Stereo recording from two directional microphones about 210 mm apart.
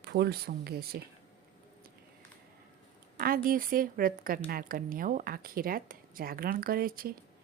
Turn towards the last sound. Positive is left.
turn(degrees=-45)  # may be behind; listen again after turning